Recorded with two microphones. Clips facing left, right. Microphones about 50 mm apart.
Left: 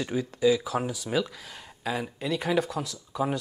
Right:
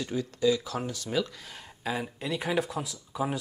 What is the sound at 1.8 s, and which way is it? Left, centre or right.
Speech, centre.